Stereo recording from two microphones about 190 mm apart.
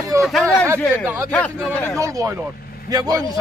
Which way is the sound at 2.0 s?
15° right (ahead or behind).